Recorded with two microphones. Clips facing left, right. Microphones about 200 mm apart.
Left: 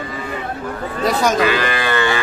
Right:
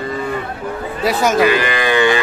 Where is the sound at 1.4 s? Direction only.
15° right (ahead or behind).